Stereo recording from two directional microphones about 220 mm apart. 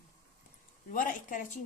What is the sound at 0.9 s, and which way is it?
Speech, 35° left (ahead or behind).